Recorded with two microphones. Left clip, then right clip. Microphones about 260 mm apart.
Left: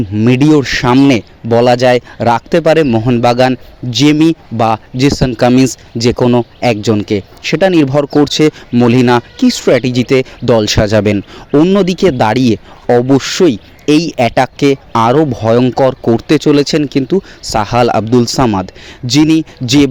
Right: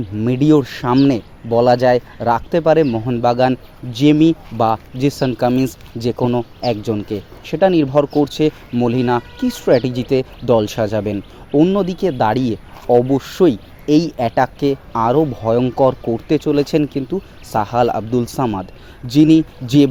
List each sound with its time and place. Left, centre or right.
0.2 s speech: left